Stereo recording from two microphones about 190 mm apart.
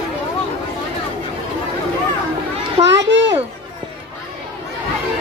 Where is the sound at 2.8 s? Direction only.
70° right (ahead or behind).